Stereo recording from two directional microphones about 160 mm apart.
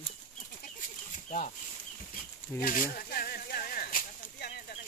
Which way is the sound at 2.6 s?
65° left (ahead or behind).